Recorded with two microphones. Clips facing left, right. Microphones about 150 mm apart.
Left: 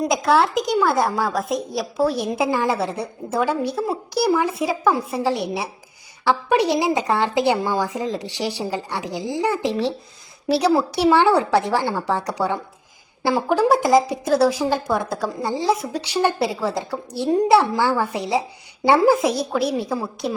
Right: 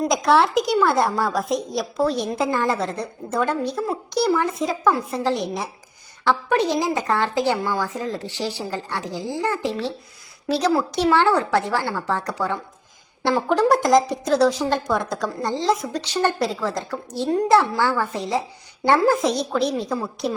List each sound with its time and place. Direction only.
0.1 s a woman's voice: centre (ahead or behind)